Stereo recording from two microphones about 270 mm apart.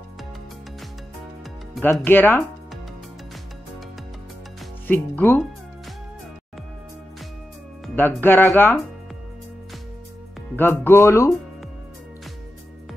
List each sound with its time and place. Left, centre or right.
1.8 s speech: centre
4.8 s speech: centre
7.8 s speech: centre
10.5 s speech: centre